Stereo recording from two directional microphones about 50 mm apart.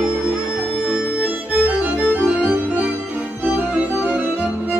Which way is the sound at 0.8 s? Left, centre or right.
Right.